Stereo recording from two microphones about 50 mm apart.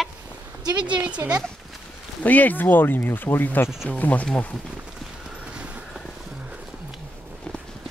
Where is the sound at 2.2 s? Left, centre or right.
Left.